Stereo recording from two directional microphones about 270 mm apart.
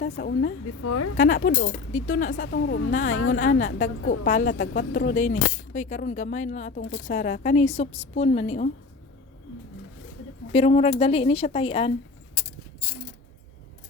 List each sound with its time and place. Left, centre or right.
0.0 s speech: left
0.8 s speech: left
1.1 s speech: left
2.4 s speech: left
2.9 s speech: left
10.5 s speech: left